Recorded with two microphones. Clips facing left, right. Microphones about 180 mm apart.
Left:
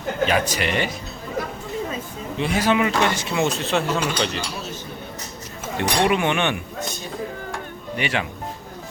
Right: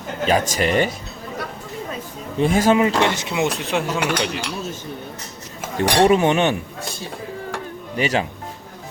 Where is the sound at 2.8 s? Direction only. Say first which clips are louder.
Right 2 dB; 25° right (ahead or behind).